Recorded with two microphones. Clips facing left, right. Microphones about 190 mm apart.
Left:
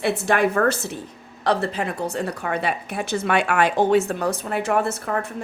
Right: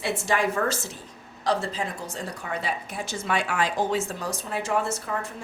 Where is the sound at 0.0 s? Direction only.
60° left (ahead or behind).